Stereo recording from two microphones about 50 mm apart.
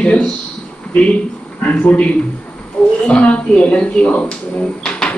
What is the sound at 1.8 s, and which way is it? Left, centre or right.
Speech, left.